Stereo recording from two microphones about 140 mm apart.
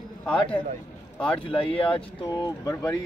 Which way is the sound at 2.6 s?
25° left (ahead or behind).